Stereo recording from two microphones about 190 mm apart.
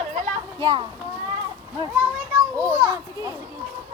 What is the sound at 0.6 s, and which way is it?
Speech, 20° right (ahead or behind).